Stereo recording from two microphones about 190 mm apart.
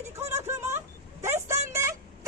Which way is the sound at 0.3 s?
15° right (ahead or behind).